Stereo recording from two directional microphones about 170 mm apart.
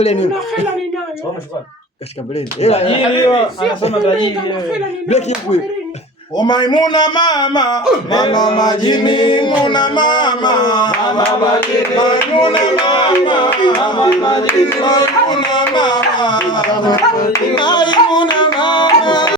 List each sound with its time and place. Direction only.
0.0 s speech: 40° left (ahead or behind)
2.6 s a man's voice: 40° left (ahead or behind)
5.0 s speech: 40° left (ahead or behind)
6.3 s a man's voice: 25° left (ahead or behind)
14.8 s a sound: 25° left (ahead or behind)
17.3 s music: 25° left (ahead or behind)